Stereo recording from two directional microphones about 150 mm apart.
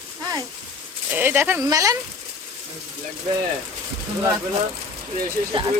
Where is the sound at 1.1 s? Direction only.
15° right (ahead or behind).